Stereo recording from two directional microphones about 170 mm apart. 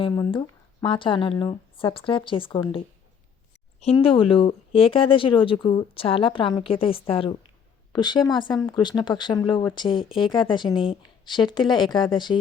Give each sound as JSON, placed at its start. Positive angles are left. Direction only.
{"t": 0.0, "sound": "speech", "side_deg": 30}
{"t": 3.9, "sound": "speech", "side_deg": 30}